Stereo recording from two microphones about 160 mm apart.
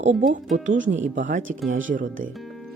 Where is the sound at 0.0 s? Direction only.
50° right (ahead or behind).